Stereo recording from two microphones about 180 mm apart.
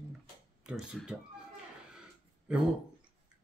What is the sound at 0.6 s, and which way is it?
Speech, 5° right (ahead or behind).